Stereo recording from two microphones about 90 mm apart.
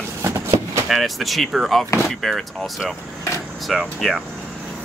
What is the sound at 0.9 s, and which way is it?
Speech, centre (ahead or behind).